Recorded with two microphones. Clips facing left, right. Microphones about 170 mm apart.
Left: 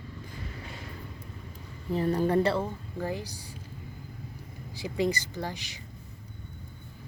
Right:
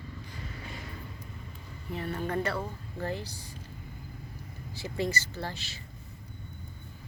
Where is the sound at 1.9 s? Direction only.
35° left (ahead or behind).